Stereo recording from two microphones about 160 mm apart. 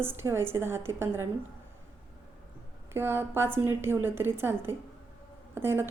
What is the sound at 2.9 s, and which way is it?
A woman's voice, 15° right (ahead or behind).